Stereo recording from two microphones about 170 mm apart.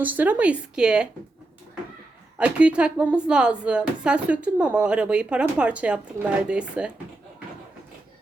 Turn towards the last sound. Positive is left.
turn(degrees=-5)  # may be behind; listen again after turning